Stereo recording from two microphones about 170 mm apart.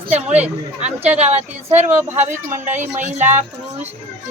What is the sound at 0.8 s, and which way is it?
A woman's voice, 40° right (ahead or behind).